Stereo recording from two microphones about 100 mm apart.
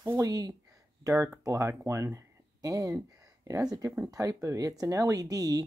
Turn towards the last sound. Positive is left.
turn(degrees=-35)  # may be behind; listen again after turning